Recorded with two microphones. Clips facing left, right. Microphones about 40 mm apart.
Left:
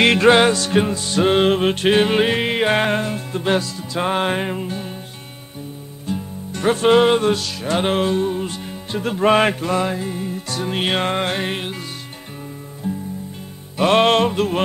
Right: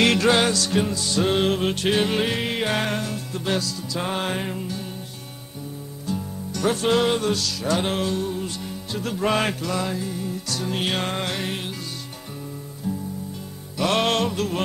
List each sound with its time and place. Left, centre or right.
0.0 s music: left
6.0 s music: left
12.8 s music: left